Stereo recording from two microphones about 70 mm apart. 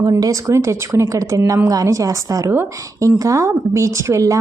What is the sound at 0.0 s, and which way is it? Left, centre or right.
A woman's voice, right.